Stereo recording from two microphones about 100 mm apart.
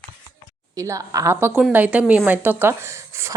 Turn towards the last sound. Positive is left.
turn(degrees=-30)  # may be behind; listen again after turning